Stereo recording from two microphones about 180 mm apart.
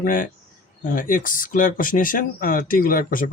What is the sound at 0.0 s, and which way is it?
Speech, 50° left (ahead or behind).